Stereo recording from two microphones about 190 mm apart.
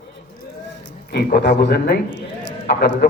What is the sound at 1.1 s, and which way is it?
A man's voice, 55° left (ahead or behind).